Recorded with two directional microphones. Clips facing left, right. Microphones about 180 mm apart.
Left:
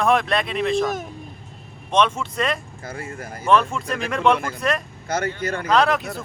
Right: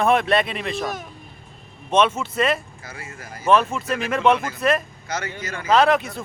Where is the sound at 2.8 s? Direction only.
50° left (ahead or behind).